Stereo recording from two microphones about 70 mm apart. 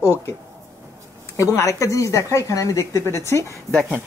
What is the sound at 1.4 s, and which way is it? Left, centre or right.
Speech, left.